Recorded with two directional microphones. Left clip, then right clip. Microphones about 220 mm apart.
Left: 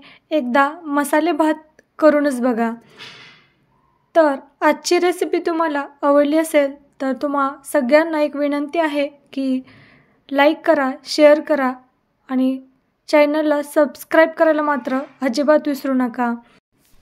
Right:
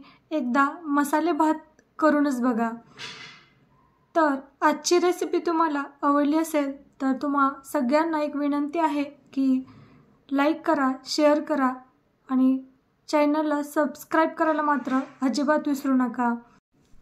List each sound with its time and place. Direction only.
0.0 s a woman's voice: 25° left (ahead or behind)
4.1 s a woman's voice: 25° left (ahead or behind)